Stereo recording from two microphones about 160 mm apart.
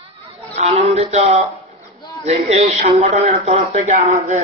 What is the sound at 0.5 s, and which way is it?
A man's voice, 40° right (ahead or behind).